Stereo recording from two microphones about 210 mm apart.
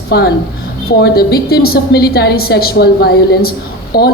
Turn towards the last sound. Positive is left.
turn(degrees=45)  # may be behind; listen again after turning